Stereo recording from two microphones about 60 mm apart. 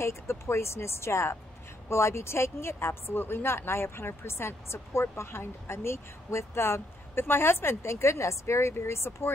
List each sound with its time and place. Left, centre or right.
0.0 s speech: left